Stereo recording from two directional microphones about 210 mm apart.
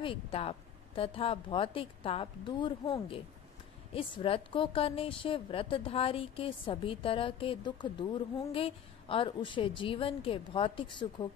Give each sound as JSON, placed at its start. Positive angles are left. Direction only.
{"t": 0.0, "sound": "a woman's voice", "side_deg": 25}